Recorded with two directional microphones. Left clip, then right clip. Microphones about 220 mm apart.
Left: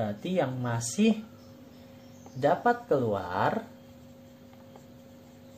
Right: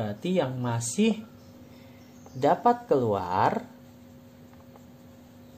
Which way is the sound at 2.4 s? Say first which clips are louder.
Right 3 dB; 45° right (ahead or behind).